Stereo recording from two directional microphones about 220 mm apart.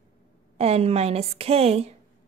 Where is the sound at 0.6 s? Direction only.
30° right (ahead or behind).